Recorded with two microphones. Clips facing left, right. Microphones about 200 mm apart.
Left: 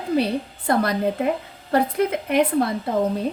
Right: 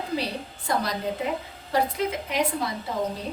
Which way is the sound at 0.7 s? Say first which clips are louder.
Left 7 dB; 55° left (ahead or behind).